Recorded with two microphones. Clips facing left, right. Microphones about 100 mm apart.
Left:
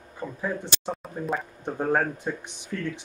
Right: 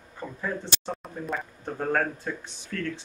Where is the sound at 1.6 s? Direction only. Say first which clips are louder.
Left 2 dB; 15° left (ahead or behind).